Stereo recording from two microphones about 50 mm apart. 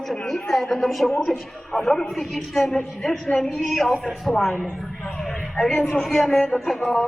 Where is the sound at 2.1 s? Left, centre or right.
Centre.